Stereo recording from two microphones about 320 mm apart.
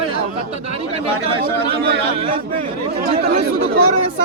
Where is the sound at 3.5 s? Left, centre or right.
Right.